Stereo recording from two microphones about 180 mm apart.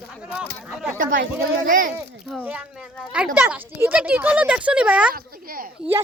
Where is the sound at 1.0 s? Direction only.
50° right (ahead or behind).